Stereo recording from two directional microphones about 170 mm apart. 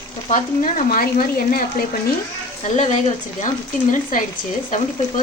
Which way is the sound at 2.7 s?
40° left (ahead or behind).